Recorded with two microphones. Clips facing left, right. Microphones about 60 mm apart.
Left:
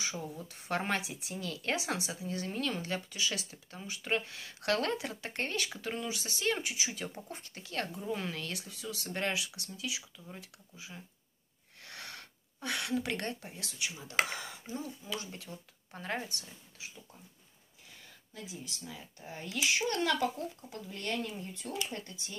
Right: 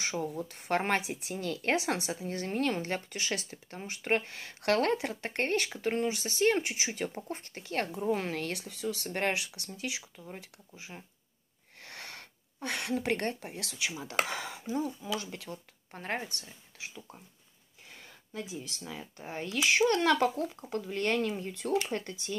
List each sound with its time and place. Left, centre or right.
0.0 s speech: right
7.9 s speech: right
11.8 s sneeze: right
12.6 s speech: right
13.5 s speech: right
15.9 s speech: right
16.7 s speech: right
18.3 s speech: right
21.7 s speech: right